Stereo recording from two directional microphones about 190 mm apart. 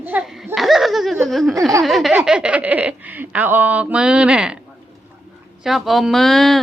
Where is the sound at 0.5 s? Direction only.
Centre (ahead or behind).